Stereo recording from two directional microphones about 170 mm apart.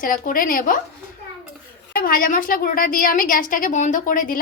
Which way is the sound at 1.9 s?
60° left (ahead or behind).